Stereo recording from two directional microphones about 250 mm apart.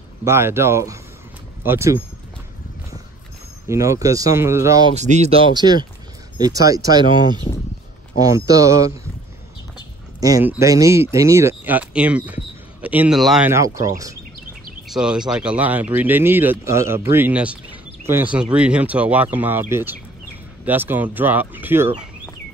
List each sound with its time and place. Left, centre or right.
0.2 s speech: centre
3.6 s speech: centre
4.9 s speech: right
8.5 s speech: centre
10.2 s speech: centre
14.9 s speech: centre
20.6 s speech: centre